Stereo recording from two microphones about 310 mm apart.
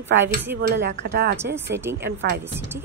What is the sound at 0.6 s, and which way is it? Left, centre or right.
Speech, right.